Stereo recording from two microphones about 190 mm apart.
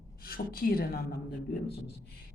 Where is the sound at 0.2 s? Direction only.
50° left (ahead or behind).